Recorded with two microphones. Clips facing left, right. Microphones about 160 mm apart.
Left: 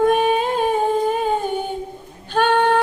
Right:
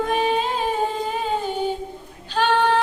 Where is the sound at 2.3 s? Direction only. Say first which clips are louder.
Left 3 dB; 55° left (ahead or behind).